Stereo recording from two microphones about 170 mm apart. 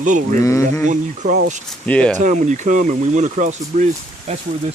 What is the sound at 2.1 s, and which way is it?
Speech, 45° right (ahead or behind).